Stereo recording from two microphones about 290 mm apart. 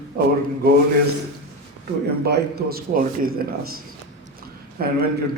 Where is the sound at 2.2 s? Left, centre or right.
Right.